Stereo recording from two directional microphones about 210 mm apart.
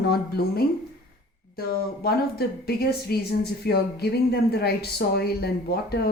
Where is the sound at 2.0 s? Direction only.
50° left (ahead or behind).